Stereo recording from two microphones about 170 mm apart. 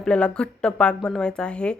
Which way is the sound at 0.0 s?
5° left (ahead or behind).